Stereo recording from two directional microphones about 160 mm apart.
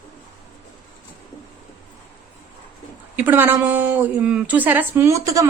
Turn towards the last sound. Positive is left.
turn(degrees=-20)  # may be behind; listen again after turning